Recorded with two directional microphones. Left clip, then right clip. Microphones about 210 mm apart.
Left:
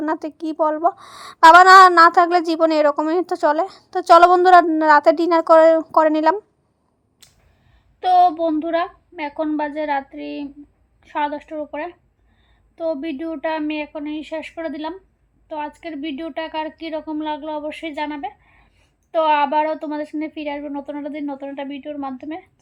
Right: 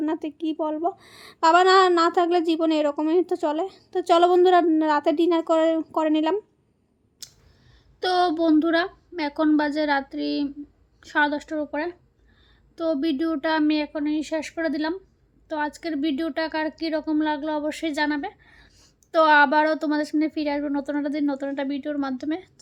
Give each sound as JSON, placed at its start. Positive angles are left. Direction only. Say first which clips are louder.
{"t": 0.0, "sound": "a woman's voice", "louder": "left 3 dB", "side_deg": 10}
{"t": 8.0, "sound": "a woman's voice", "louder": "left 6 dB", "side_deg": -15}